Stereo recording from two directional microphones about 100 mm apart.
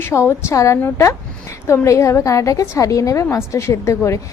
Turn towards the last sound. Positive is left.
turn(degrees=30)  # may be behind; listen again after turning